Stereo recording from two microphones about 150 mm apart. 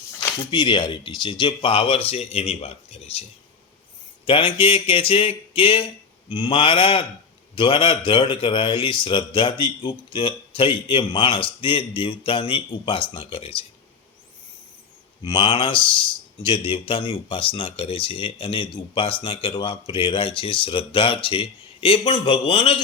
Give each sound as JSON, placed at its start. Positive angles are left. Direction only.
{"t": 0.5, "sound": "a man's voice", "side_deg": 30}
{"t": 4.3, "sound": "a man's voice", "side_deg": 35}
{"t": 15.2, "sound": "a man's voice", "side_deg": 30}